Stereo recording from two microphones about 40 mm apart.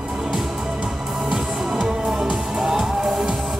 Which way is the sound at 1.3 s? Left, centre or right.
Centre.